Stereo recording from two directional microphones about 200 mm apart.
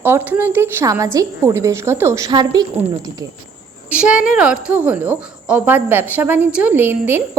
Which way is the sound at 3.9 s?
5° right (ahead or behind).